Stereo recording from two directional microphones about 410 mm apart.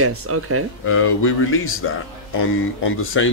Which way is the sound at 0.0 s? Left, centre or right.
Right.